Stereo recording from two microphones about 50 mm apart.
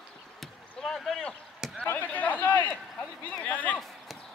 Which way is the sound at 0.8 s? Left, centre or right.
Centre.